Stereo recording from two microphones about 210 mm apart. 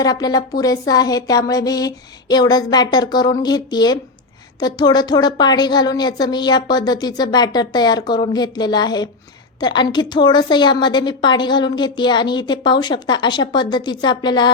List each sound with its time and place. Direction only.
0.0 s a woman's voice: 20° left (ahead or behind)